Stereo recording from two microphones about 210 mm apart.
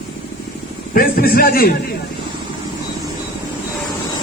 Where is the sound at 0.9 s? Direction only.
45° left (ahead or behind).